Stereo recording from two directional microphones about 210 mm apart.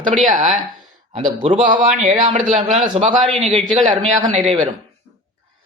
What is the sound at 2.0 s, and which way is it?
Speech, 35° right (ahead or behind).